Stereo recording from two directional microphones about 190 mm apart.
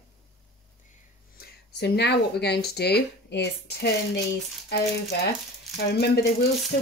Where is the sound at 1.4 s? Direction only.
60° left (ahead or behind).